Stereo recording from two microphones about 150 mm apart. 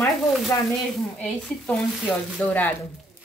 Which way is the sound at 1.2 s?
5° left (ahead or behind).